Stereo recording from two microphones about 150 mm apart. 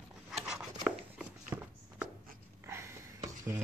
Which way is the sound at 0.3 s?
5° right (ahead or behind).